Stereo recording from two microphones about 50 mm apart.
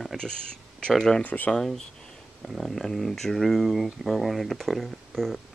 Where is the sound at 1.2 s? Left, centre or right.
Left.